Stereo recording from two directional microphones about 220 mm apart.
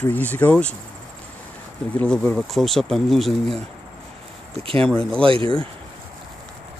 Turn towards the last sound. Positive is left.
turn(degrees=-25)  # may be behind; listen again after turning